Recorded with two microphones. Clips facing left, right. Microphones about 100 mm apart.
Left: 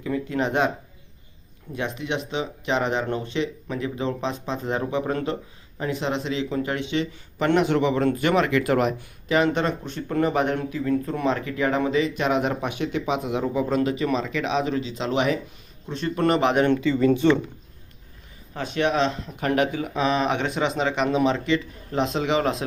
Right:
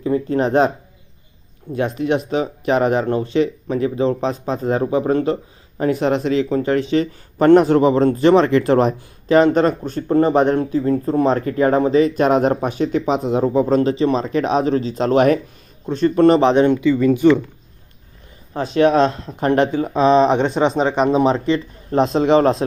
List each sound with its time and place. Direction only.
0.0 s speech: 35° right (ahead or behind)
1.7 s speech: 40° right (ahead or behind)
16.6 s speech: 15° right (ahead or behind)
18.5 s speech: 35° right (ahead or behind)